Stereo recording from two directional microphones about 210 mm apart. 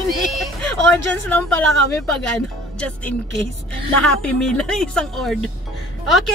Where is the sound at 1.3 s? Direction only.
10° left (ahead or behind).